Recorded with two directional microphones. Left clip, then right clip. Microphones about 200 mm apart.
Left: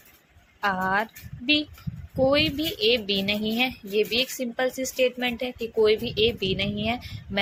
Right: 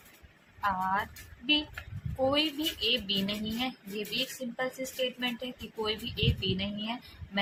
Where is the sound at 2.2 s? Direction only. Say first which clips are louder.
Left 6 dB; 25° left (ahead or behind).